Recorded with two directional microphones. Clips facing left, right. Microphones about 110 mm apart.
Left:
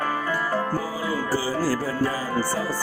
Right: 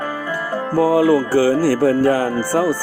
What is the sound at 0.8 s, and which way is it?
Speech, 80° right.